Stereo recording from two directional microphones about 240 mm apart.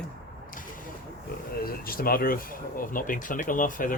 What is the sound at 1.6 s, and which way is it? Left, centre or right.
Speech, left.